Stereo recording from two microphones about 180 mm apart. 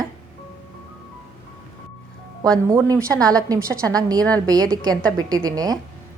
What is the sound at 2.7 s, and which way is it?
A woman's voice, 20° right (ahead or behind).